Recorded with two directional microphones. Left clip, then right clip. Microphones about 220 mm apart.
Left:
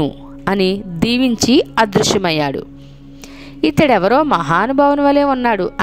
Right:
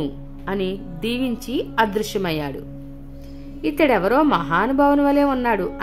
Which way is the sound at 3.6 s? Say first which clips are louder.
Left 5 dB; 40° left (ahead or behind).